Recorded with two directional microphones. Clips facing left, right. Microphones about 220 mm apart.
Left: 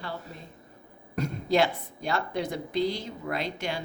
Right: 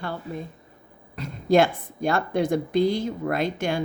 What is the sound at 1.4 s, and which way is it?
A woman's voice, 50° right (ahead or behind).